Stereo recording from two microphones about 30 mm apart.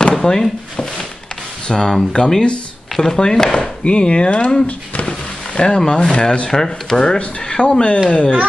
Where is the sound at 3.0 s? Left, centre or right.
Left.